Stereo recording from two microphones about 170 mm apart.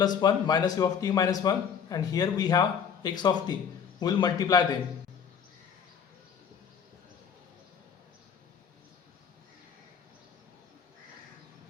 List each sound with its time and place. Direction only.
0.0 s a man's voice: 25° left (ahead or behind)